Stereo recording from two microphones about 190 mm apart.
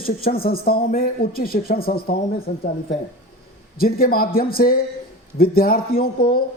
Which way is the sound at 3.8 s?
50° left (ahead or behind).